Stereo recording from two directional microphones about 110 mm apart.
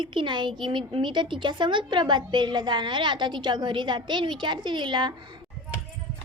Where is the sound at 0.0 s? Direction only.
50° right (ahead or behind).